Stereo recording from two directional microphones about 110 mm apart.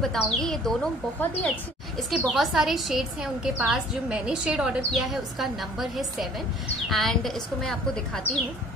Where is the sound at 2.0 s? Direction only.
Centre (ahead or behind).